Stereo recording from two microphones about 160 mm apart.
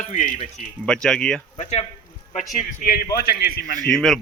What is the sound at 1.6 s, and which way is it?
Speech, 40° left (ahead or behind).